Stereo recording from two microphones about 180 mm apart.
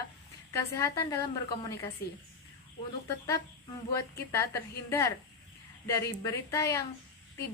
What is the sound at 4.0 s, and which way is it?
A woman's voice, 20° left (ahead or behind).